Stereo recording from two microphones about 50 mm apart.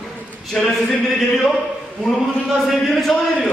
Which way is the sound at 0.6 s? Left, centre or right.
Centre.